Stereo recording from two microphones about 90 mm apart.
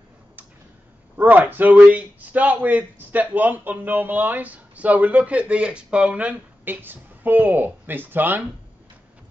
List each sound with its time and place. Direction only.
1.1 s a man's voice: 20° right (ahead or behind)